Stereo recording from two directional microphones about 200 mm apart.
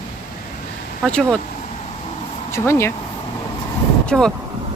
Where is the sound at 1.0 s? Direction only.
5° left (ahead or behind).